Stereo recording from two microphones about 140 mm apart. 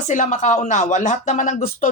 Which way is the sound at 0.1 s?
65° left (ahead or behind).